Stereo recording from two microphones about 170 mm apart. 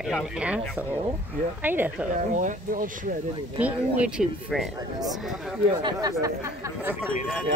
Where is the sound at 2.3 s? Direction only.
50° right (ahead or behind).